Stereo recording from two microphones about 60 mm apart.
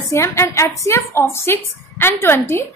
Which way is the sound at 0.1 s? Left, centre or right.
Left.